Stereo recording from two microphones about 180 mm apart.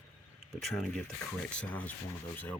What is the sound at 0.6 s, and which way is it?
Speech, centre (ahead or behind).